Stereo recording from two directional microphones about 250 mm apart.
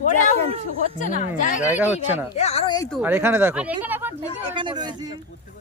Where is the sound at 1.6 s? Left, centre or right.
Centre.